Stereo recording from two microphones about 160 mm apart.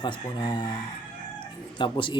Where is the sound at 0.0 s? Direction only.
30° left (ahead or behind).